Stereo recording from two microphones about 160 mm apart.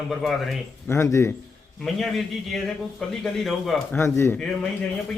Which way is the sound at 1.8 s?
Centre (ahead or behind).